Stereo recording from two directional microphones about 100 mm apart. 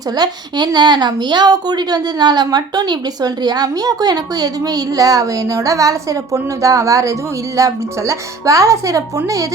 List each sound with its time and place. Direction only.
0.2 s a woman's voice: 45° right (ahead or behind)